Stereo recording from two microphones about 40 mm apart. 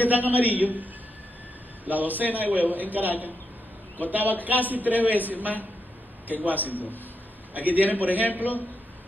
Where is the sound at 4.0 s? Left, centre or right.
Right.